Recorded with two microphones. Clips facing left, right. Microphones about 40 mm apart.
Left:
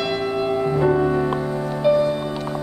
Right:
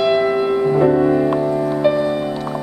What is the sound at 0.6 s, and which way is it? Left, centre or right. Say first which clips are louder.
Music: right 4 dB; centre.